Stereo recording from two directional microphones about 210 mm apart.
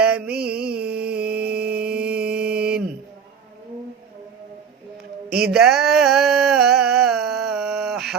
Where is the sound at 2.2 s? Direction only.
50° right (ahead or behind).